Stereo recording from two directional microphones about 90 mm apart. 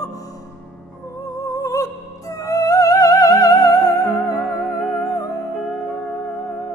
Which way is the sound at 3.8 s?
5° right (ahead or behind).